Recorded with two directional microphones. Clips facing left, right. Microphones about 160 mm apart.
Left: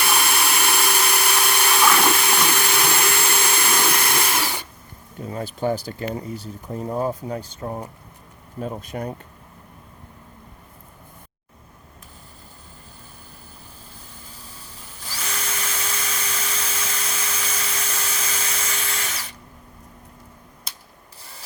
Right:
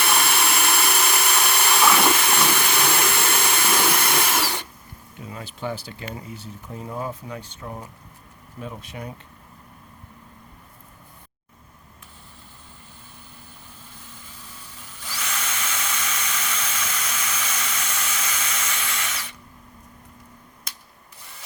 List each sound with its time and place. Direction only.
0.0 s tools: centre (ahead or behind)
5.2 s speech: 40° left (ahead or behind)
15.0 s drill: 35° left (ahead or behind)